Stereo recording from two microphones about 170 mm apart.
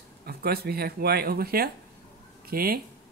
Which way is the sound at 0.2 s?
65° right (ahead or behind).